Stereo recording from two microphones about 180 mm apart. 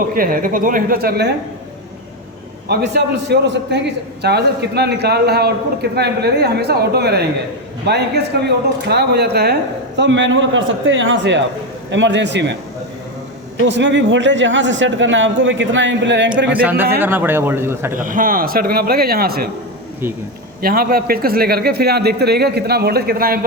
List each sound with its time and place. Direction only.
0.1 s a woman's voice: 50° right (ahead or behind)
2.6 s a man's voice: 70° right (ahead or behind)
13.7 s speech: 80° right
16.6 s a man's voice: 10° right (ahead or behind)
18.0 s a man's voice: 50° right (ahead or behind)
20.6 s a man's voice: 55° right (ahead or behind)